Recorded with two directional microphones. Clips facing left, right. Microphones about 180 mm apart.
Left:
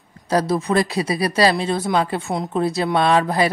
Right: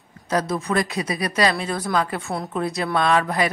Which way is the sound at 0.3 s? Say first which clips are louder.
Left 4 dB; 35° left (ahead or behind).